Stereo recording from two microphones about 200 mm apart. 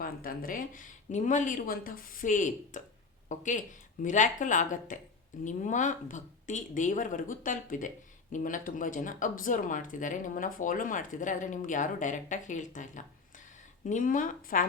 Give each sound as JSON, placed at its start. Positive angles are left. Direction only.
{"t": 0.0, "sound": "speech", "side_deg": 45}